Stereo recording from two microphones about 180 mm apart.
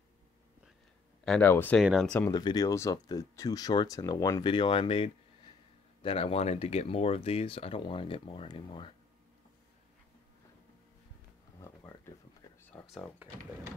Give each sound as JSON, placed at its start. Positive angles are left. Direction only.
{"t": 1.2, "sound": "speech", "side_deg": 0}
{"t": 1.8, "sound": "speech", "side_deg": 0}
{"t": 2.3, "sound": "speech", "side_deg": 20}
{"t": 12.7, "sound": "speech", "side_deg": 5}